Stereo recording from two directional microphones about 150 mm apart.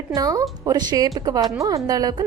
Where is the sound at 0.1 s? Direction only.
25° right (ahead or behind).